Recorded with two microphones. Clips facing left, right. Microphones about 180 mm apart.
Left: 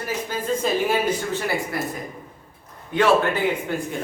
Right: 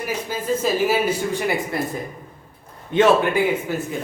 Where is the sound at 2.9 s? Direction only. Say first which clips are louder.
Right 2 dB; 15° right (ahead or behind).